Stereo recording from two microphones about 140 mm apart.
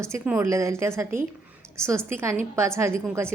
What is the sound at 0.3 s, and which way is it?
A woman's voice, 20° right (ahead or behind).